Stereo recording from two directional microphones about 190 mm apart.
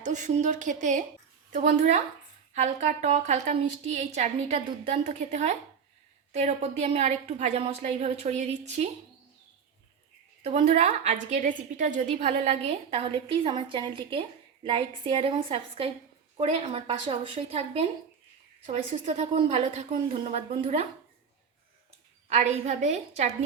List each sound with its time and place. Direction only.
0.0 s a woman's voice: 40° right (ahead or behind)
10.4 s a woman's voice: 35° right (ahead or behind)
22.3 s a woman's voice: 35° right (ahead or behind)